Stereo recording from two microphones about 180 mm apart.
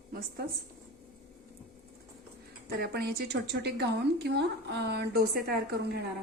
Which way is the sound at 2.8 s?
60° right (ahead or behind).